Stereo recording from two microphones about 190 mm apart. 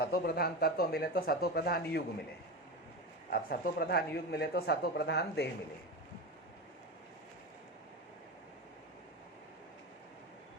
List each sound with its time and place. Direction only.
0.0 s speech: 55° left (ahead or behind)
3.2 s speech: 55° left (ahead or behind)